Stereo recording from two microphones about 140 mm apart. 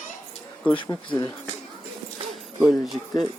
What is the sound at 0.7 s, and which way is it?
Speech, 35° left (ahead or behind).